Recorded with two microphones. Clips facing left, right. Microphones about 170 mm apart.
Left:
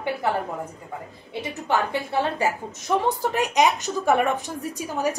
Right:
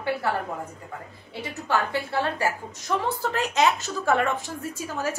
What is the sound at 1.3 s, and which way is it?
A woman's voice, 20° left (ahead or behind).